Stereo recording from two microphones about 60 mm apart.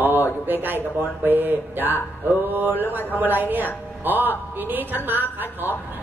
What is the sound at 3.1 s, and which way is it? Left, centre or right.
A woman's voice, right.